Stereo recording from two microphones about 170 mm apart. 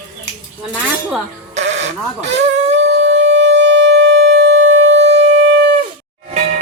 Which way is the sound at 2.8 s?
90° right.